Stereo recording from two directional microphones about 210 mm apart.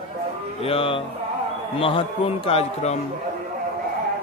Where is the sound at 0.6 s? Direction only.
25° left (ahead or behind).